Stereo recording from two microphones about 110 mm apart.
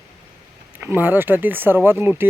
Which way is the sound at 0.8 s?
20° right (ahead or behind).